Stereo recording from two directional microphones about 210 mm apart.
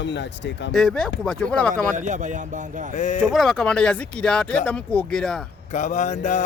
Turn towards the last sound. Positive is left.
turn(degrees=35)  # may be behind; listen again after turning